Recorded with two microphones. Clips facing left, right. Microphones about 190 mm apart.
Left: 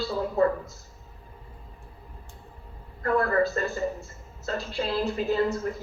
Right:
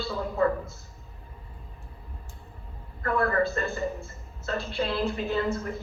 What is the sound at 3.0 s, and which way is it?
A man's voice, 40° left (ahead or behind).